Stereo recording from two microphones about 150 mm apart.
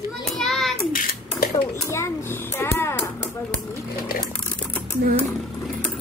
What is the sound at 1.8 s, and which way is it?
A child's voice, 20° left (ahead or behind).